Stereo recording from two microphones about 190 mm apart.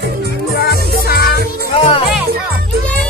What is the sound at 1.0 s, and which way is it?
Music, 55° left (ahead or behind).